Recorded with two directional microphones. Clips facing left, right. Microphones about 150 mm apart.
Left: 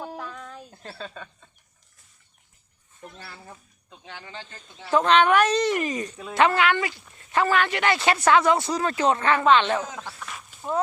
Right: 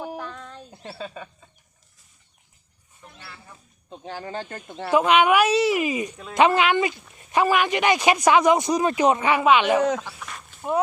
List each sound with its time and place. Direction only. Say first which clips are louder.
0.2 s a sound: right 1 dB; 5° left (ahead or behind)
0.7 s speech: right 3 dB; 10° right (ahead or behind)
3.8 s speech: right 9 dB; 35° right (ahead or behind); by 4.9 s 60° right (ahead or behind)
4.9 s speech: right 1 dB; 10° right (ahead or behind)